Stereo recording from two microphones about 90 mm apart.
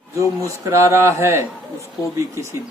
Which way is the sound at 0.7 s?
30° right (ahead or behind).